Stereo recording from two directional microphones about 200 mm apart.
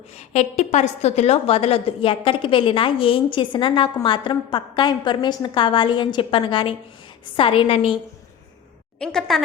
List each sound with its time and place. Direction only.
0.1 s a woman's voice: 35° left (ahead or behind)
9.0 s a woman's voice: centre (ahead or behind)